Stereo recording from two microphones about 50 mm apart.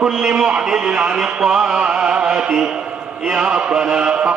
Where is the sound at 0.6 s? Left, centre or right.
Centre.